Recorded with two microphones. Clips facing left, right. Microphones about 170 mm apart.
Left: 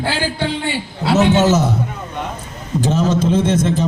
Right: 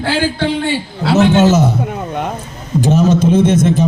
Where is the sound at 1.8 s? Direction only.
60° right (ahead or behind).